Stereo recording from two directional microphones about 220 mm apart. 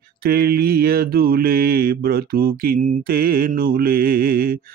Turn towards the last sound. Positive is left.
turn(degrees=-40)  # may be behind; listen again after turning